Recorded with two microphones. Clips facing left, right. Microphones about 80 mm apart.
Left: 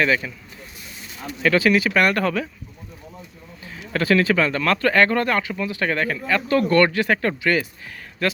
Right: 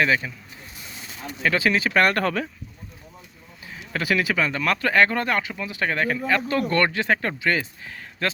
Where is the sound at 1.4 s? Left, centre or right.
Right.